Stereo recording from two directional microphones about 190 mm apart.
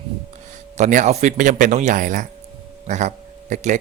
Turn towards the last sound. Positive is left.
turn(degrees=-40)  # may be behind; listen again after turning